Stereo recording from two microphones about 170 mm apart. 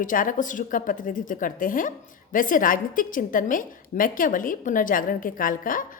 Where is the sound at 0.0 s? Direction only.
50° left (ahead or behind).